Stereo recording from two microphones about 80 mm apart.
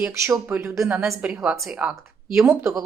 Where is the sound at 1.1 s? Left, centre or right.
Right.